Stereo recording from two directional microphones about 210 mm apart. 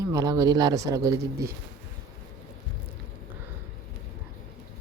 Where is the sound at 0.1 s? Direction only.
15° right (ahead or behind).